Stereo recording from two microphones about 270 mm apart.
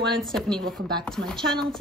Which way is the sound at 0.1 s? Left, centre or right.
Centre.